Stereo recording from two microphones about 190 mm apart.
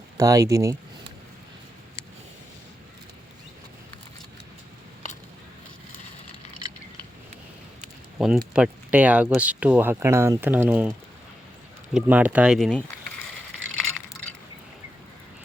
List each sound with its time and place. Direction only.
0.2 s speech: 20° right (ahead or behind)
8.2 s speech: centre (ahead or behind)
11.9 s speech: 10° right (ahead or behind)